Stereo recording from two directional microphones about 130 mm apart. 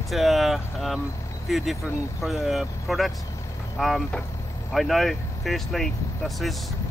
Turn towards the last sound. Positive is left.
turn(degrees=0)  # may be behind; listen again after turning